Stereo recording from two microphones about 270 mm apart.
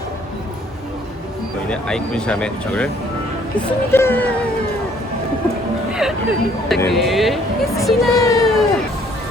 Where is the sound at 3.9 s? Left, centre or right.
Centre.